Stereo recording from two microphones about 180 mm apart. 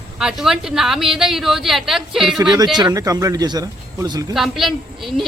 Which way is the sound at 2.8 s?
20° right (ahead or behind).